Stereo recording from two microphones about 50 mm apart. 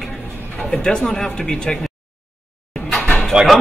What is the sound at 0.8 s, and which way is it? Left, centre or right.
Speech, centre.